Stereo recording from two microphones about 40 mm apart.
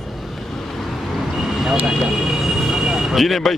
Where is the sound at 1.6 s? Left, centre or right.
Centre.